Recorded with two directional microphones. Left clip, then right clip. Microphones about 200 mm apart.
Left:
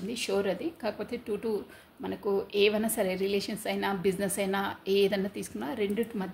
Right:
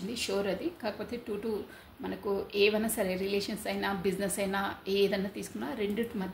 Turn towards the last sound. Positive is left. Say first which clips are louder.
# left 2 dB
turn(degrees=50)  # may be behind; listen again after turning